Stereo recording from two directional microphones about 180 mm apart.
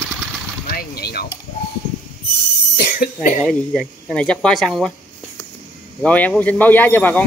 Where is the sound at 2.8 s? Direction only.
65° left (ahead or behind).